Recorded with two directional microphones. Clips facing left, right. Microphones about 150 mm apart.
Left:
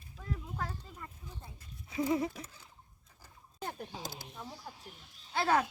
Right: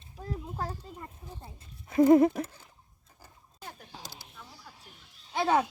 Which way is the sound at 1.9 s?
50° right (ahead or behind).